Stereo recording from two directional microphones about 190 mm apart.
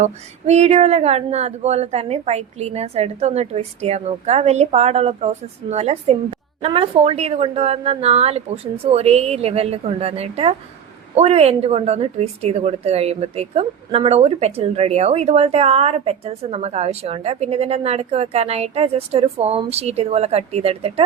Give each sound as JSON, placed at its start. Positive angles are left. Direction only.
{"t": 0.0, "sound": "a woman's voice", "side_deg": -35}